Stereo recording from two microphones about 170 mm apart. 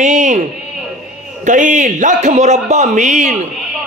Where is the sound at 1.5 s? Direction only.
50° right (ahead or behind).